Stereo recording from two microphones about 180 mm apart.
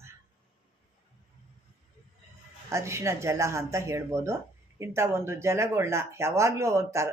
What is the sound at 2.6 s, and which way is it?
Speech, 15° right (ahead or behind).